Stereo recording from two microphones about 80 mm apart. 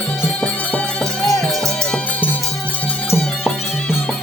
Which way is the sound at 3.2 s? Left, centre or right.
Centre.